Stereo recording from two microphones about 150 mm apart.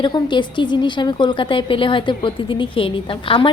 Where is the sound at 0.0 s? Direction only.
30° left (ahead or behind).